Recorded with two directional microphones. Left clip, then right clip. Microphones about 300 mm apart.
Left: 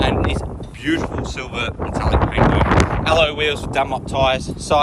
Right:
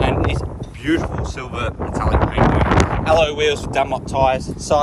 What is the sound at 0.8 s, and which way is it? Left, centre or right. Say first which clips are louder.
Speech: right 1 dB; centre.